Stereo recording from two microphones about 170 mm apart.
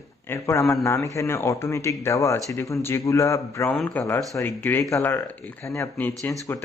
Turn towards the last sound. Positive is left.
turn(degrees=15)  # may be behind; listen again after turning